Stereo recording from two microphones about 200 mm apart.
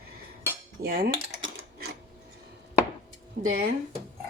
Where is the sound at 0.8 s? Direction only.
45° right (ahead or behind).